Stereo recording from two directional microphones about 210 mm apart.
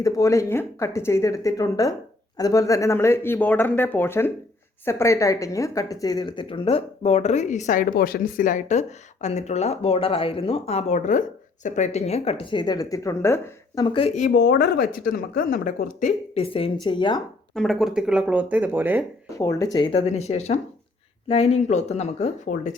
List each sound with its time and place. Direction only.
0.0 s speech: 15° left (ahead or behind); by 14.3 s 30° left (ahead or behind)
14.3 s speech: 50° left (ahead or behind); by 17.2 s 20° left (ahead or behind)
17.5 s speech: centre (ahead or behind)
19.4 s speech: 15° left (ahead or behind); by 22.7 s 35° left (ahead or behind)